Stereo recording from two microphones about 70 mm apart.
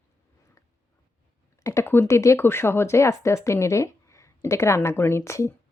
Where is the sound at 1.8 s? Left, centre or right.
Left.